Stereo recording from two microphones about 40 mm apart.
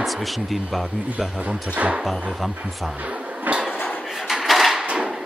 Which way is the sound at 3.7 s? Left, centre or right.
Left.